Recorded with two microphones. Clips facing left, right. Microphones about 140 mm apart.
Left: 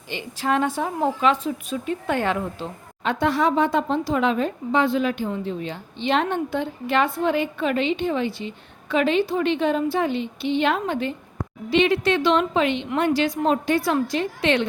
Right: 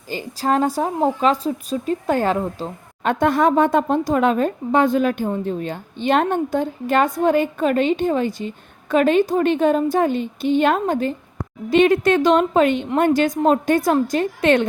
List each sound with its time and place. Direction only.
0.1 s a woman's voice: 40° right (ahead or behind)